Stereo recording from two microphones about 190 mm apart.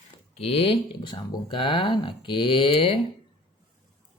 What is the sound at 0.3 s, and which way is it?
Speech, 30° left (ahead or behind).